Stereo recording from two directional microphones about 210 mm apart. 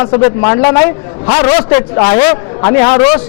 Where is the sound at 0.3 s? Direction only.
20° left (ahead or behind).